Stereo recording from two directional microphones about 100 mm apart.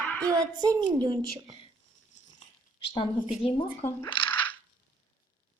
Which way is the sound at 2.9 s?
60° left (ahead or behind).